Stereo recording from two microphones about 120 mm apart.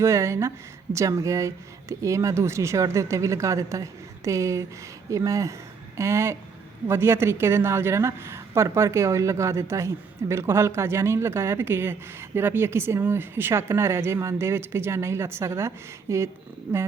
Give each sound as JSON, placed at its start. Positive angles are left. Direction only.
{"t": 0.0, "sound": "a woman's voice", "side_deg": -25}